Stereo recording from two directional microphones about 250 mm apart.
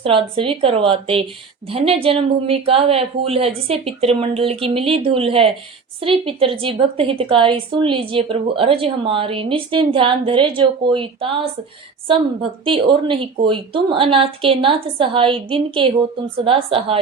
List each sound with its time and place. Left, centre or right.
0.0 s a woman's voice: right
12.6 s a woman's voice: right